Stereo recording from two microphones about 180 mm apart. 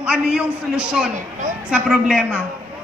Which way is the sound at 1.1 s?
45° right (ahead or behind).